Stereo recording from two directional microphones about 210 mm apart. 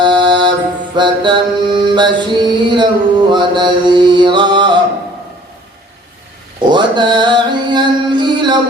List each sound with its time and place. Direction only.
0.0 s mantra: 20° right (ahead or behind)
6.6 s music: 20° right (ahead or behind)